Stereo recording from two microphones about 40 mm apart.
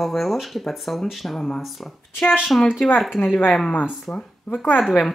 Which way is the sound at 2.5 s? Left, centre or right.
Left.